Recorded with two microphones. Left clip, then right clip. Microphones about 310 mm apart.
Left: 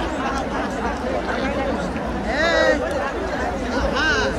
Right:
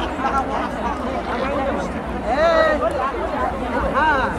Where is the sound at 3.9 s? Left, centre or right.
Centre.